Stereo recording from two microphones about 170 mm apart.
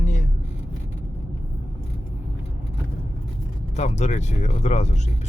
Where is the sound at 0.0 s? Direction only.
45° left (ahead or behind).